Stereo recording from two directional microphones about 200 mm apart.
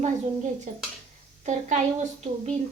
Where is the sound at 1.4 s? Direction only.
35° right (ahead or behind).